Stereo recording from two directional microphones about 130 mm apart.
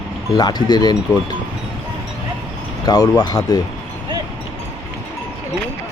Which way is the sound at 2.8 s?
30° left (ahead or behind).